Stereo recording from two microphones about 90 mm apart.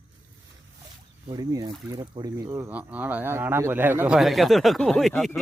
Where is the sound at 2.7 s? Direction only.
15° right (ahead or behind).